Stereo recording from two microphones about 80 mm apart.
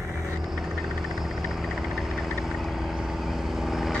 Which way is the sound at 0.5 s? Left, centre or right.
Centre.